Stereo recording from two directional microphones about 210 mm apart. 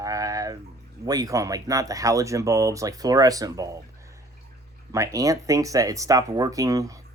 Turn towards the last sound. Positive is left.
turn(degrees=-15)  # may be behind; listen again after turning